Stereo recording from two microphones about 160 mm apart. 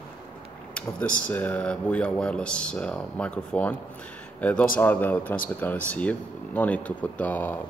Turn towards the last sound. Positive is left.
turn(degrees=10)  # may be behind; listen again after turning